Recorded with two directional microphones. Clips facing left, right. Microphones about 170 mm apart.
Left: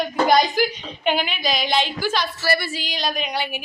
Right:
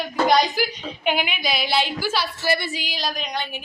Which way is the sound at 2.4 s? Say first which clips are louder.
Left 1 dB; 20° right (ahead or behind).